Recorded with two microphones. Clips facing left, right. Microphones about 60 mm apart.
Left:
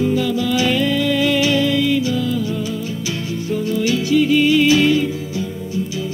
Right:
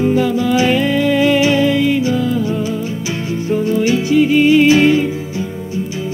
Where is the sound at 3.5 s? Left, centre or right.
Right.